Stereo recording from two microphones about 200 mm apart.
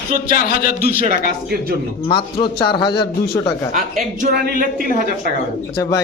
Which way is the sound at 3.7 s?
40° right (ahead or behind).